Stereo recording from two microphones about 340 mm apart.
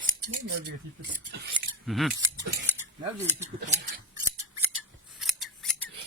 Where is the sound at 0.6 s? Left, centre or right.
Right.